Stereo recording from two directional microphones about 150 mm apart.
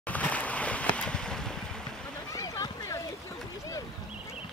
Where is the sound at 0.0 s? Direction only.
10° left (ahead or behind).